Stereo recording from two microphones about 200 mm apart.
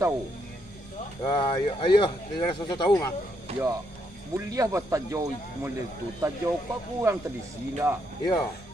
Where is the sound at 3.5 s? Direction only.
30° right (ahead or behind).